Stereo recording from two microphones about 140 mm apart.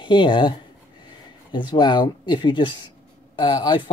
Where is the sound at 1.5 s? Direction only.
35° left (ahead or behind).